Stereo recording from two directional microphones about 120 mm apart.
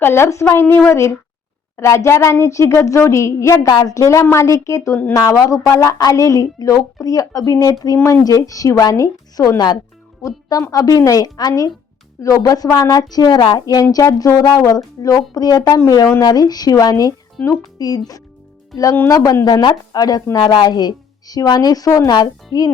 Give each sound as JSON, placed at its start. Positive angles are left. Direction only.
{"t": 0.0, "sound": "a woman's voice", "side_deg": 20}